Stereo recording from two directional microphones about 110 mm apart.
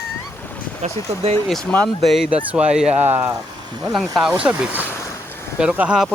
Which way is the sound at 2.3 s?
10° right (ahead or behind).